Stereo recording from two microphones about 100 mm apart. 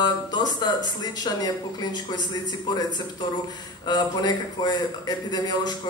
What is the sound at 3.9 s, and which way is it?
Speech, 45° left (ahead or behind).